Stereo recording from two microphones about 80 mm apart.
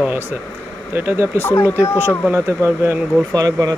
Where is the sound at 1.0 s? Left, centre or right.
Right.